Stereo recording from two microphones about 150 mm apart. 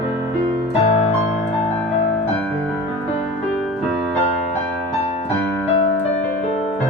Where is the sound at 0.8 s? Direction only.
45° left (ahead or behind).